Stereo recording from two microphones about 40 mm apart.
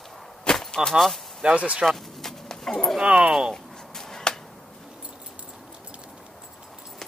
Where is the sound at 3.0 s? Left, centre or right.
Right.